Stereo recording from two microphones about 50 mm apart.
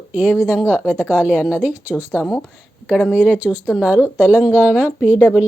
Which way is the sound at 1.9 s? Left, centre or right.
Centre.